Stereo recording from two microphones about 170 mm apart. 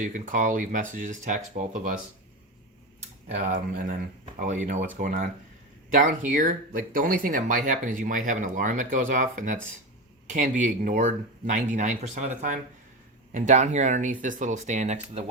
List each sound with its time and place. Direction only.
0.0 s speech: 50° right (ahead or behind)
3.2 s speech: 45° right (ahead or behind)
13.3 s speech: 45° right (ahead or behind)